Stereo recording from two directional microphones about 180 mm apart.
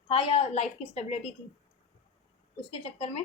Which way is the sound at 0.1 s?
30° left (ahead or behind).